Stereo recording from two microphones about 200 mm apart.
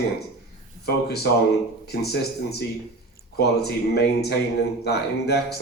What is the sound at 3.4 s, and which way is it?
A man's voice, 55° left (ahead or behind).